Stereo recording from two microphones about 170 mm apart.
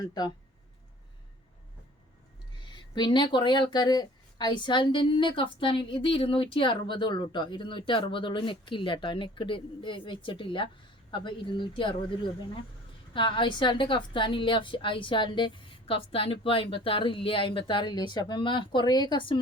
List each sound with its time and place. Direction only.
2.7 s speech: 25° left (ahead or behind)